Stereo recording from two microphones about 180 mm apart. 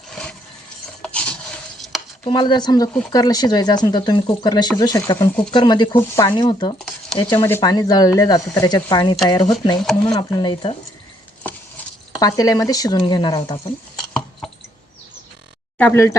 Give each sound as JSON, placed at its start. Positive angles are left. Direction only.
{"t": 0.1, "sound": "a sound", "side_deg": 5}
{"t": 1.0, "sound": "filing", "side_deg": 5}
{"t": 2.2, "sound": "speech", "side_deg": 25}
{"t": 12.2, "sound": "speech", "side_deg": 20}
{"t": 15.8, "sound": "speech", "side_deg": 15}